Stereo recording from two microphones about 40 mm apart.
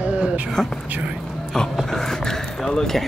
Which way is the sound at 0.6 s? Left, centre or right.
Centre.